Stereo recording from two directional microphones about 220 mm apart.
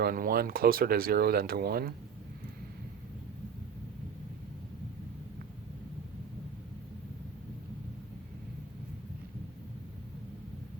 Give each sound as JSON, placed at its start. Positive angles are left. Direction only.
{"t": 0.0, "sound": "speech", "side_deg": -40}